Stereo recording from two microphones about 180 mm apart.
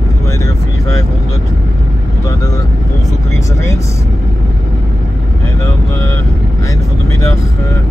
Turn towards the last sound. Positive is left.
turn(degrees=15)  # may be behind; listen again after turning